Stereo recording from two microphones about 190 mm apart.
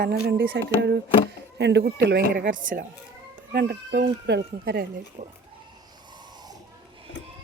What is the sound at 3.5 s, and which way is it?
Speech, 60° right (ahead or behind).